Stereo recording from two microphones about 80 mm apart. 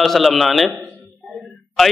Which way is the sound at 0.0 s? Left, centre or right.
Centre.